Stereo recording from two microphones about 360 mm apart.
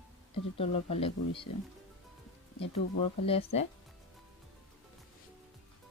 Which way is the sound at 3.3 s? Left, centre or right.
Centre.